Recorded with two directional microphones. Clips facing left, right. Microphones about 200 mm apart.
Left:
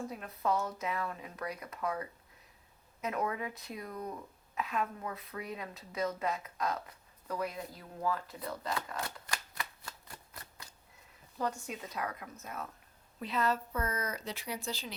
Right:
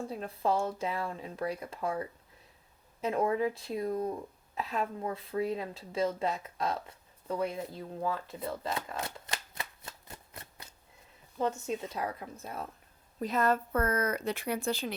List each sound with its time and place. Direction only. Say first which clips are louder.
0.1 s speech: right 4 dB; 30° right (ahead or behind)
13.1 s speech: right 4 dB; 45° right (ahead or behind)